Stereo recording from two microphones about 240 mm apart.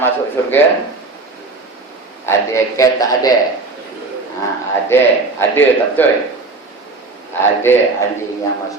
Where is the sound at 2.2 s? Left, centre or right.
Centre.